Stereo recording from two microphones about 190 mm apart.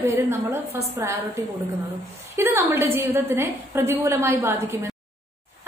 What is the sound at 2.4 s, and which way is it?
A woman's voice, 10° right (ahead or behind).